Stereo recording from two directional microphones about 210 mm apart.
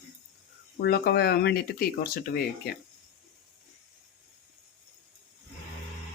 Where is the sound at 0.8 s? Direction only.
50° left (ahead or behind).